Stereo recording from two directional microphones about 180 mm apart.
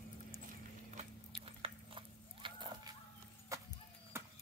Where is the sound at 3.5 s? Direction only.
20° right (ahead or behind).